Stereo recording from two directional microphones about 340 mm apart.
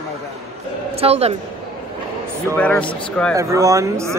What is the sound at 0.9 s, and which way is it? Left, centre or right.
Speech, centre.